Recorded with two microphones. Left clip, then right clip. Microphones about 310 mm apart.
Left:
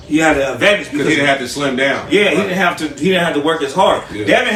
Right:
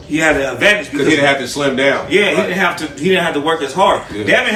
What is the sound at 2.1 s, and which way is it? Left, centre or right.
Speech, centre.